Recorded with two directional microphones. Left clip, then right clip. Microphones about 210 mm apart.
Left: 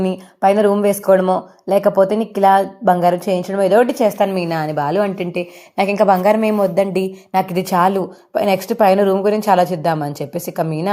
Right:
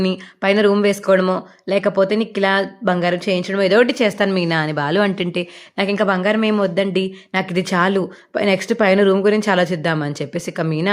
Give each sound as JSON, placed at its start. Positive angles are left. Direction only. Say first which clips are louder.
{"t": 0.0, "sound": "a woman's voice", "louder": "left 4 dB", "side_deg": -10}
{"t": 1.8, "sound": "a woman's voice", "louder": "left 3 dB", "side_deg": -20}
{"t": 2.0, "sound": "a woman's voice", "louder": "left 5 dB", "side_deg": -5}
{"t": 5.9, "sound": "a woman's voice", "louder": "left 5 dB", "side_deg": -10}